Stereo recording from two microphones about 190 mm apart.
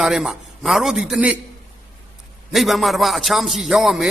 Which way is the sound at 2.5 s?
Centre (ahead or behind).